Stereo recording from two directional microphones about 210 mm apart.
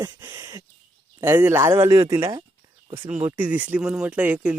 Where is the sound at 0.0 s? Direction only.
10° right (ahead or behind).